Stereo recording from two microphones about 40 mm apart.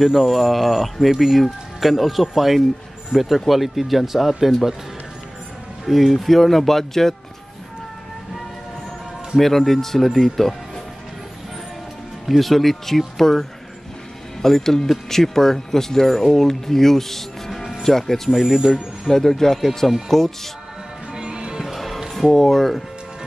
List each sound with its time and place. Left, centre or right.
0.0 s speech: centre
5.9 s speech: centre
9.4 s speech: centre
12.3 s speech: centre
18.3 s speech: centre
19.0 s speech: centre
21.1 s music: centre
21.7 s music: centre
22.1 s speech: centre